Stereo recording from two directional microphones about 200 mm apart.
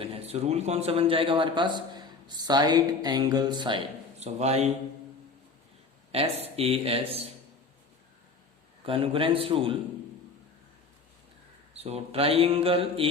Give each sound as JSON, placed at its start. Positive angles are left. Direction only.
{"t": 0.0, "sound": "a man's voice", "side_deg": -30}
{"t": 6.1, "sound": "a man's voice", "side_deg": -30}
{"t": 8.8, "sound": "a man's voice", "side_deg": -25}
{"t": 11.7, "sound": "a man's voice", "side_deg": -30}